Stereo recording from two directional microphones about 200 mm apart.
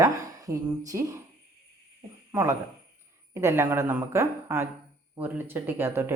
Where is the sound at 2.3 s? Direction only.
10° right (ahead or behind).